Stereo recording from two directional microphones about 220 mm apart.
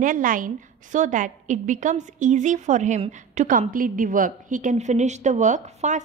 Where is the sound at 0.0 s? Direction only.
35° right (ahead or behind).